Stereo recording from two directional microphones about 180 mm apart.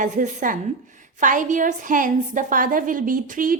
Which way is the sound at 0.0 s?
45° right (ahead or behind).